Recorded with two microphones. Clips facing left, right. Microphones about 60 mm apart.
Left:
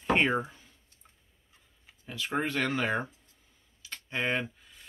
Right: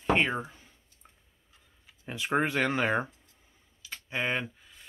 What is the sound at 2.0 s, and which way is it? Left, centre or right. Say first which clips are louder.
Speech: right 3 dB; right.